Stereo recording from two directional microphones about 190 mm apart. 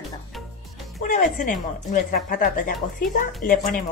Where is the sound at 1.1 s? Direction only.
40° left (ahead or behind).